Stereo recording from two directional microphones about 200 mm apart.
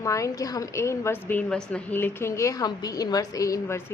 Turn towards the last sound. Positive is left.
turn(degrees=15)  # may be behind; listen again after turning